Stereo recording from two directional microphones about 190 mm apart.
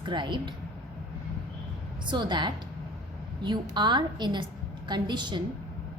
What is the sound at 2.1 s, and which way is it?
A woman's voice, 25° right (ahead or behind).